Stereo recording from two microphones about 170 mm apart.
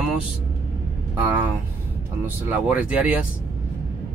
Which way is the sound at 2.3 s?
10° right (ahead or behind).